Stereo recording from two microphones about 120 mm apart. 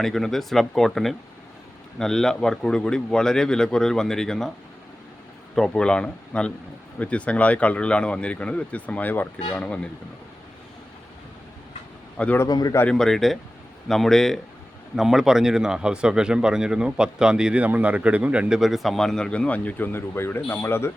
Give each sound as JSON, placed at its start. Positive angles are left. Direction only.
{"t": 0.0, "sound": "speech", "side_deg": 0}
{"t": 5.5, "sound": "speech", "side_deg": 10}
{"t": 12.1, "sound": "a man's voice", "side_deg": 10}
{"t": 12.4, "sound": "a man's voice", "side_deg": 30}
{"t": 12.8, "sound": "speech", "side_deg": 5}